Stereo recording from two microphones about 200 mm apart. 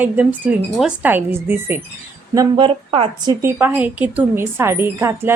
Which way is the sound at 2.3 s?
25° right (ahead or behind).